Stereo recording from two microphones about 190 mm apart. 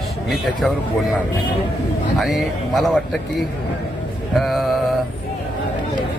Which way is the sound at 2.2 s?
Centre (ahead or behind).